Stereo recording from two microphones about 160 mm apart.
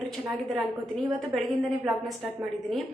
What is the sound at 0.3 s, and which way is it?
A woman's voice, centre (ahead or behind).